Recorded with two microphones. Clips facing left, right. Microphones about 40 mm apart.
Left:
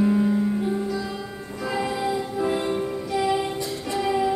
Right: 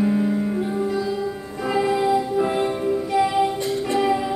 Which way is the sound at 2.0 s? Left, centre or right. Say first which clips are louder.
Right 6 dB; centre.